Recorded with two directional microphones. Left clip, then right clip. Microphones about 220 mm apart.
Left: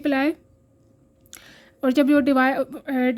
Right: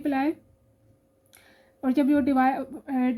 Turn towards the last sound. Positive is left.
turn(degrees=45)  # may be behind; listen again after turning